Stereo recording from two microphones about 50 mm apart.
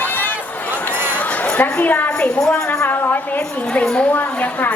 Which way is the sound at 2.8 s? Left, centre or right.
Left.